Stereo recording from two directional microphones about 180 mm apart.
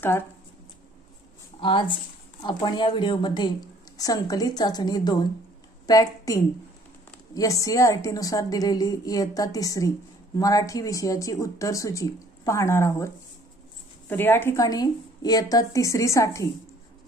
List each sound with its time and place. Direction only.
1.6 s a woman's voice: 25° left (ahead or behind)